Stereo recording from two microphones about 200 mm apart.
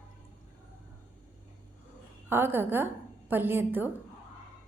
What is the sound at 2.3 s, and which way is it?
A woman's voice, 10° right (ahead or behind).